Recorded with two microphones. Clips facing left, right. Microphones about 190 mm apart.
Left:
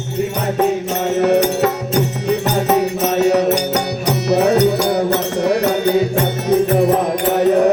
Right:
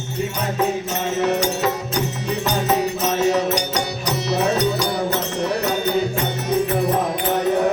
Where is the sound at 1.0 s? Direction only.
65° left (ahead or behind).